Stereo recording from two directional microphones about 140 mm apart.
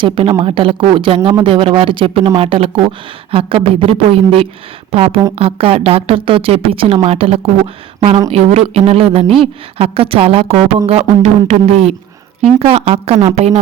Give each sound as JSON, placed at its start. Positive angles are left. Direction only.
{"t": 0.0, "sound": "speech", "side_deg": -40}